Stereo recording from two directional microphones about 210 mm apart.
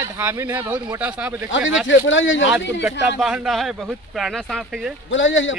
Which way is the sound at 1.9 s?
65° left (ahead or behind).